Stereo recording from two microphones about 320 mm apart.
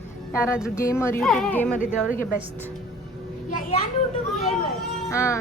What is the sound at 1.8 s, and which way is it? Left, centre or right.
Speech, left.